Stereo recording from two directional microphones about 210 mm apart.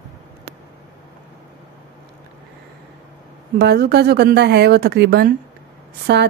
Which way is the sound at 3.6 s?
50° right (ahead or behind).